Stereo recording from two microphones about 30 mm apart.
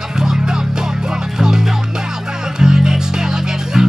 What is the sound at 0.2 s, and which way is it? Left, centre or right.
Music, right.